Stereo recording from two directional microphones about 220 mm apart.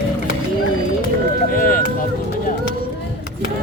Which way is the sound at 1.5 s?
40° left (ahead or behind).